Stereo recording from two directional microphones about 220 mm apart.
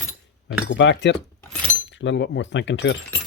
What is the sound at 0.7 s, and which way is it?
Speech, 55° left (ahead or behind).